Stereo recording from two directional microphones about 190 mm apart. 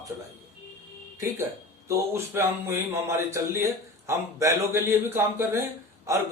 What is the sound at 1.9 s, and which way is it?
Speech, 15° right (ahead or behind).